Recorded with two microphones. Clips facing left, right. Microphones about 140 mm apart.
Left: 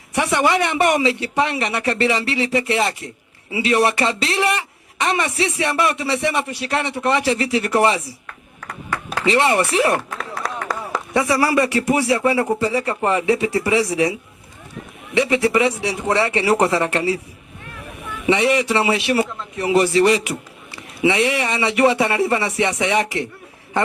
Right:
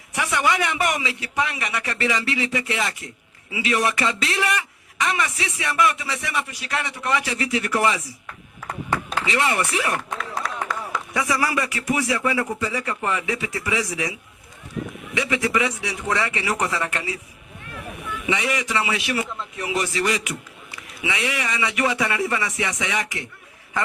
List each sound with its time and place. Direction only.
0.1 s a man's voice: 30° left (ahead or behind)
9.1 s a man's voice: 30° left (ahead or behind)
18.3 s a man's voice: 30° left (ahead or behind)